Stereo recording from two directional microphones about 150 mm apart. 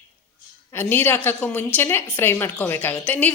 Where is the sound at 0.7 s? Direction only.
15° left (ahead or behind).